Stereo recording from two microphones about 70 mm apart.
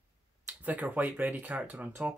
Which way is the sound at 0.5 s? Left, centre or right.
Centre.